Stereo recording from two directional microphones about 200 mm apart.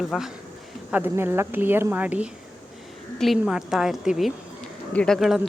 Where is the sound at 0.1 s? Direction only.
Centre (ahead or behind).